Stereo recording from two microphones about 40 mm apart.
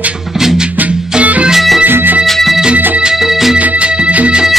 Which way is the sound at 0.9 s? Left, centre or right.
Centre.